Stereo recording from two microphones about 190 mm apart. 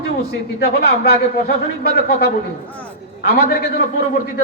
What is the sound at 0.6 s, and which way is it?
Speech, 55° left (ahead or behind).